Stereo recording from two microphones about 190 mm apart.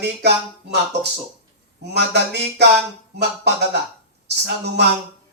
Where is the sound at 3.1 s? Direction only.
65° right (ahead or behind).